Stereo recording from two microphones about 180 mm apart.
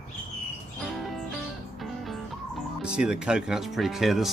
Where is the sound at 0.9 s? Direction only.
Centre (ahead or behind).